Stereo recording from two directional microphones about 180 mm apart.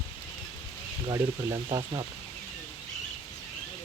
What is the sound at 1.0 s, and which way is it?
Speech, 15° right (ahead or behind).